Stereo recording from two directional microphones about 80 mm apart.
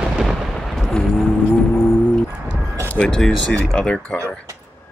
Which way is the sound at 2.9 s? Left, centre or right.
Centre.